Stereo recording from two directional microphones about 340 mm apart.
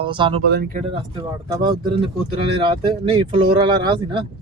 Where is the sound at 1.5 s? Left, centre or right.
Centre.